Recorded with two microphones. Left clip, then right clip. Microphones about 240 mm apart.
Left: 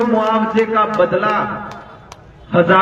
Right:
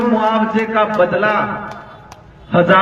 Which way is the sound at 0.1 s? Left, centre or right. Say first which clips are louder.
Even; right.